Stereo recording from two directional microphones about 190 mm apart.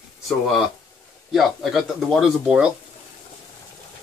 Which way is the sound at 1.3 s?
Centre (ahead or behind).